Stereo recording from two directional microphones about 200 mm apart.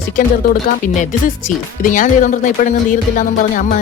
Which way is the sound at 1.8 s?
40° left (ahead or behind).